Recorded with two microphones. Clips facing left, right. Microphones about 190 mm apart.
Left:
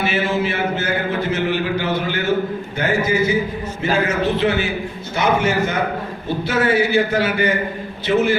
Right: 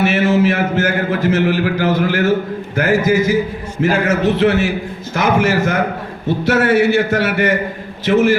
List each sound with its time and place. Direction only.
0.0 s a man's voice: 90° right
5.1 s a man's voice: 90° right